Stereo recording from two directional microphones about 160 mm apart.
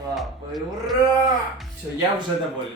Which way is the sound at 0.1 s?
Centre (ahead or behind).